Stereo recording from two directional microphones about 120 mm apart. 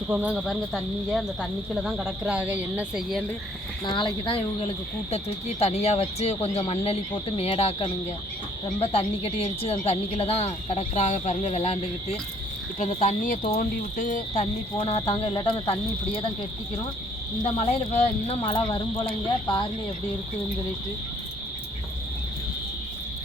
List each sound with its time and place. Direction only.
0.1 s speech: 15° right (ahead or behind)
0.3 s speech: centre (ahead or behind)
3.8 s speech: 40° left (ahead or behind)
5.1 s a woman's voice: 60° left (ahead or behind)
12.8 s speech: 80° left
15.0 s speech: 50° left (ahead or behind)
17.4 s a woman's voice: 65° left (ahead or behind); by 18.8 s 45° left (ahead or behind)